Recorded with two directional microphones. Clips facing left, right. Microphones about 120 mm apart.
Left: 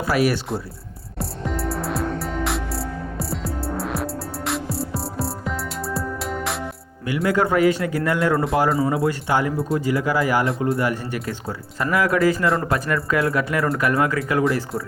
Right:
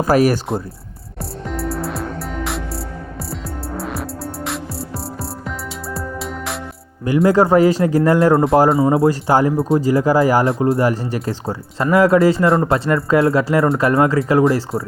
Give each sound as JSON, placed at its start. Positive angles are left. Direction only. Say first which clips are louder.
{"t": 0.0, "sound": "speech", "louder": "right 6 dB", "side_deg": -45}
{"t": 1.2, "sound": "music", "louder": "right 1 dB", "side_deg": 0}
{"t": 7.0, "sound": "a man's voice", "louder": "right 7 dB", "side_deg": -35}